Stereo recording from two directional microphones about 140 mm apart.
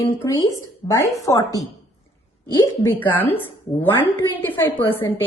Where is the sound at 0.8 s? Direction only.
20° left (ahead or behind).